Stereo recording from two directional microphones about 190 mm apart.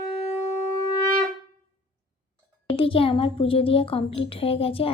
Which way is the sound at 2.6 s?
30° left (ahead or behind).